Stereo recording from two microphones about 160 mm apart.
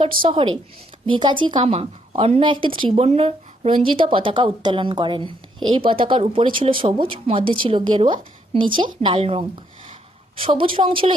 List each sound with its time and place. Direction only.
0.0 s a woman's voice: 30° right (ahead or behind)